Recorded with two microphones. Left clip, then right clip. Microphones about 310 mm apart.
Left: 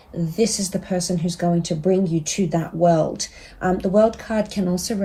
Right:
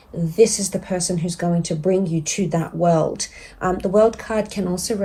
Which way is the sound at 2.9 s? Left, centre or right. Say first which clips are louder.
Even; centre.